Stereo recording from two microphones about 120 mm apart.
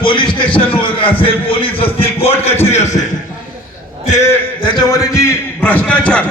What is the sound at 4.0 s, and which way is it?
Speech, 75° left (ahead or behind).